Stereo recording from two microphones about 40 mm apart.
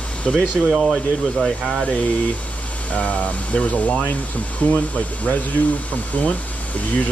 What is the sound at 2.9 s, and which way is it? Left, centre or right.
Speech, left.